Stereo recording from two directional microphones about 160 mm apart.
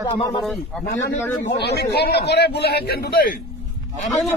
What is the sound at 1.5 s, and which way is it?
A man's voice, 90° left.